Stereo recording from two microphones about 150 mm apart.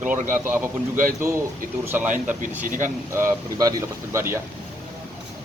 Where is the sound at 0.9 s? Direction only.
60° right (ahead or behind).